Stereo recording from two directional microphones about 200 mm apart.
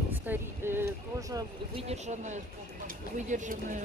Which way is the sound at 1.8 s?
35° right (ahead or behind).